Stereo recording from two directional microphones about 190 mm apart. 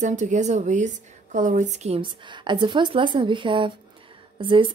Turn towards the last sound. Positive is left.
turn(degrees=-25)  # may be behind; listen again after turning